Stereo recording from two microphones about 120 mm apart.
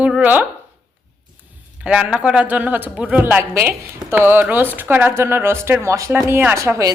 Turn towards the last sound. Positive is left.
turn(degrees=-25)  # may be behind; listen again after turning